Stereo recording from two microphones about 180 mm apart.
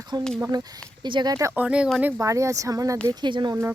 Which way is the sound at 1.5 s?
5° right (ahead or behind).